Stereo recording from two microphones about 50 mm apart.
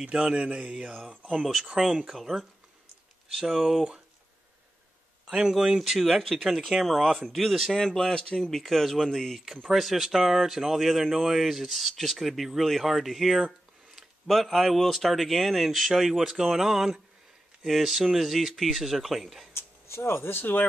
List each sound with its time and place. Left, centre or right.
0.0 s speech: centre
1.2 s speech: centre
5.2 s speech: centre
8.4 s speech: centre
19.5 s speech: left